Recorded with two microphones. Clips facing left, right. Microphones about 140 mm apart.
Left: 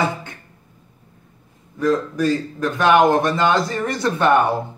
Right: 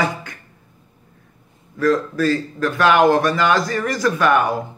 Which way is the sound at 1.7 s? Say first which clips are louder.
Right 1 dB; 20° left (ahead or behind).